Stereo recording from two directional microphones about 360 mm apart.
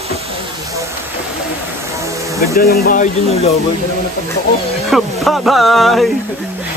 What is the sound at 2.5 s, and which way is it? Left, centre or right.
Speech, left.